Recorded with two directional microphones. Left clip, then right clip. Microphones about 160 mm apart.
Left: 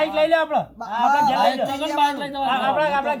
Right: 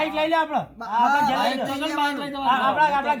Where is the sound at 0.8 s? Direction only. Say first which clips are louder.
Even; 10° left (ahead or behind).